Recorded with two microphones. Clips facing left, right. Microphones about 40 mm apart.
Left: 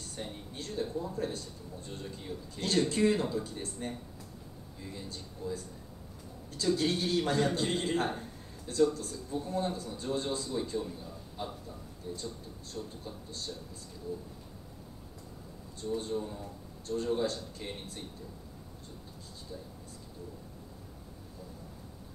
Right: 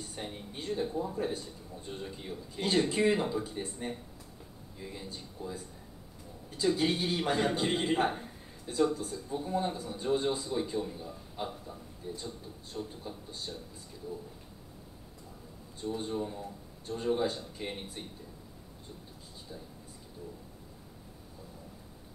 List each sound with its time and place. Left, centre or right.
0.0 s a man's voice: centre
15.8 s a man's voice: centre